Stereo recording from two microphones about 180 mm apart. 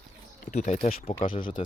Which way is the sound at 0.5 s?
40° left (ahead or behind).